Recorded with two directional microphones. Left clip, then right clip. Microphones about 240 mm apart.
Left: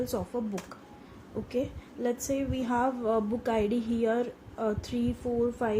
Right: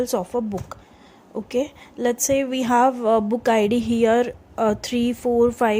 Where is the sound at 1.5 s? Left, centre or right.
Right.